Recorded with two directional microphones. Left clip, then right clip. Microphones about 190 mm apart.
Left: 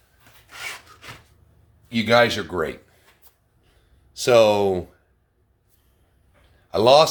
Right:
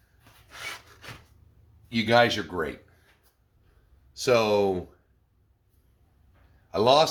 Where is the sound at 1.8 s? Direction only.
30° left (ahead or behind).